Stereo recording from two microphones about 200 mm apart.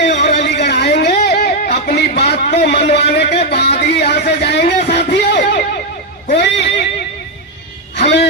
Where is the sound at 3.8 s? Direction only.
55° left (ahead or behind).